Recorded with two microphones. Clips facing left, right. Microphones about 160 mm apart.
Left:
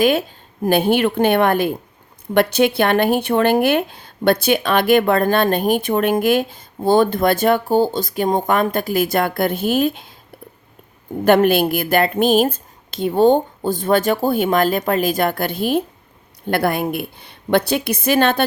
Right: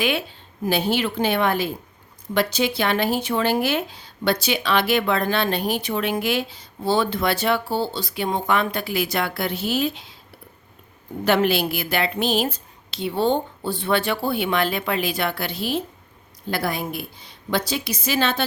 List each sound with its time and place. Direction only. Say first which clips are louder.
0.0 s a woman's voice: left 8 dB; 45° left (ahead or behind)
11.3 s a woman's voice: left 6 dB; 50° left (ahead or behind)